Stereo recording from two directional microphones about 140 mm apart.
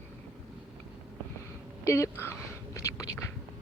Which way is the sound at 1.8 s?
20° left (ahead or behind).